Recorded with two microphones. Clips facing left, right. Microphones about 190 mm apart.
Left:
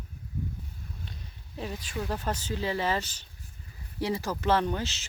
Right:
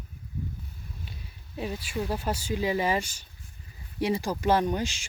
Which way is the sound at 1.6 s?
10° right (ahead or behind).